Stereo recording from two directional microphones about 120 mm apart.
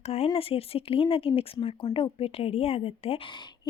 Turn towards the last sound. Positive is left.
turn(degrees=55)  # may be behind; listen again after turning